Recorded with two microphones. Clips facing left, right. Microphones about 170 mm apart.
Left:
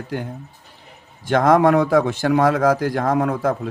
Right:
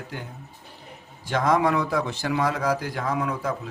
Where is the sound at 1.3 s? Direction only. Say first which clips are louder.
Left 7 dB; 55° left (ahead or behind).